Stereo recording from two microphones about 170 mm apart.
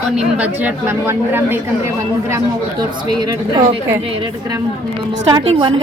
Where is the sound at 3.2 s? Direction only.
25° right (ahead or behind).